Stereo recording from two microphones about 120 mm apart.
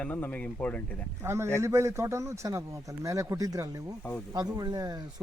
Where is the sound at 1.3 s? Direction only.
20° right (ahead or behind).